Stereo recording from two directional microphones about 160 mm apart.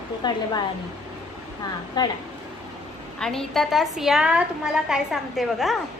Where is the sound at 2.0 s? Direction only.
25° left (ahead or behind).